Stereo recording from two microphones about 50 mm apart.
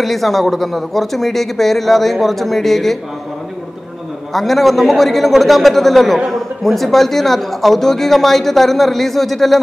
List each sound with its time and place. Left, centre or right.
0.0 s a man's voice: centre
4.3 s a man's voice: centre